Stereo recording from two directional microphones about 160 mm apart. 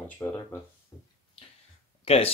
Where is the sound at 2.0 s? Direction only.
35° left (ahead or behind).